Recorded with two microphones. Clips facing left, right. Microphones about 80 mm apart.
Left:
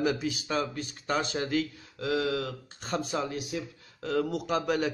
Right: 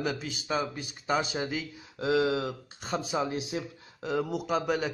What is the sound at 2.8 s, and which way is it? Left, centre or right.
Speech, centre.